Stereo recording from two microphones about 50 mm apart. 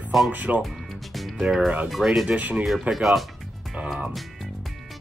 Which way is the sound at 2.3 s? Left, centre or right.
Right.